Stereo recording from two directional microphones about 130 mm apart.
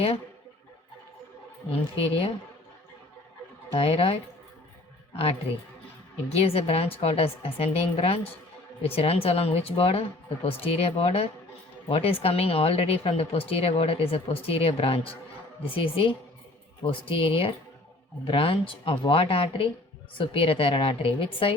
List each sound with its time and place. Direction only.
2.0 s speech: 45° left (ahead or behind)
3.8 s speech: 45° left (ahead or behind)
6.3 s speech: 50° left (ahead or behind)